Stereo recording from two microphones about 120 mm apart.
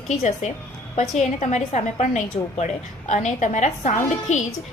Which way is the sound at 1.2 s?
75° left (ahead or behind).